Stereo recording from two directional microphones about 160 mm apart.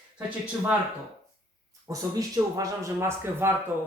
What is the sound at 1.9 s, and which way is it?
Speech, 20° right (ahead or behind).